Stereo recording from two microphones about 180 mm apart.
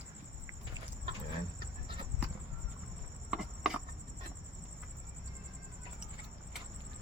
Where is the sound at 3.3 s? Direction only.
5° right (ahead or behind).